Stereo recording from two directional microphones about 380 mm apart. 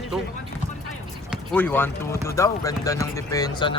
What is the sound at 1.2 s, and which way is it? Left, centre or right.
Speech, centre.